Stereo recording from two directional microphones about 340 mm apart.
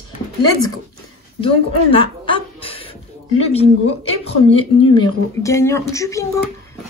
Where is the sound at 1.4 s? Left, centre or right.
Centre.